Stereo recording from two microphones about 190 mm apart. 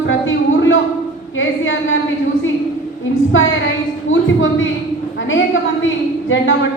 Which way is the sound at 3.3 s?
90° left.